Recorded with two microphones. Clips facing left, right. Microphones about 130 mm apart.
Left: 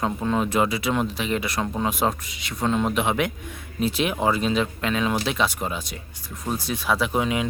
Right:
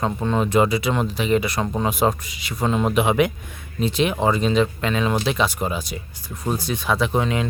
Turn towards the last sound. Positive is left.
turn(degrees=5)  # may be behind; listen again after turning